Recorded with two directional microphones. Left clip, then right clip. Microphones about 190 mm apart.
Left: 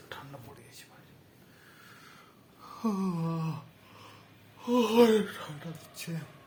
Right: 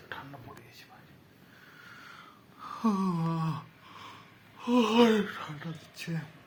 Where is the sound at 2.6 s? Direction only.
10° right (ahead or behind).